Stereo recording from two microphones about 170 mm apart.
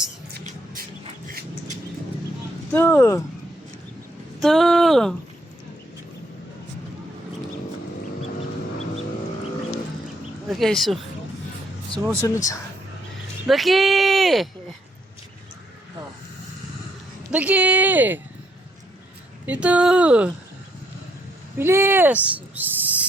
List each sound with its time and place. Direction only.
0.4 s a sound: 55° right (ahead or behind)
2.7 s speech: 15° left (ahead or behind)
4.4 s speech: centre (ahead or behind)
10.5 s speech: centre (ahead or behind)
12.2 s speech: 20° left (ahead or behind)
13.5 s speech: centre (ahead or behind)
17.3 s speech: 10° right (ahead or behind)
19.5 s speech: 10° right (ahead or behind)
21.6 s speech: 15° right (ahead or behind)